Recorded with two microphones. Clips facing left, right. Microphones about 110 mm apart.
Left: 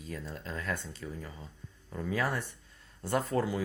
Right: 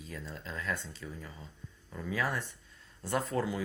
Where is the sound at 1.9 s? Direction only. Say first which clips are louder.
Left 2 dB; 35° left (ahead or behind).